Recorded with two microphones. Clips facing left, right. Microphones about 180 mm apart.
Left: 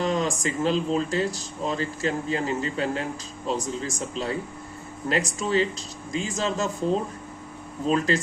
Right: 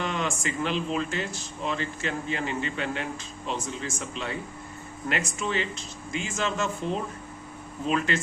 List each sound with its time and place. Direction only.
0.0 s speech: 35° left (ahead or behind)
7.9 s speech: 35° left (ahead or behind)